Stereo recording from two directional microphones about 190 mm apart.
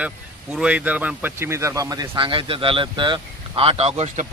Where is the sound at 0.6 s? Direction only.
5° right (ahead or behind).